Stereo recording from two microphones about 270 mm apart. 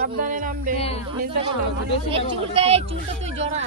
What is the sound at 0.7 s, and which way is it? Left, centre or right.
Speech, left.